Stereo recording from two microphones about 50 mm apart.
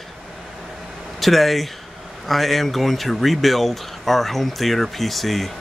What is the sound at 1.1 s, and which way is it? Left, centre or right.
Speech, centre.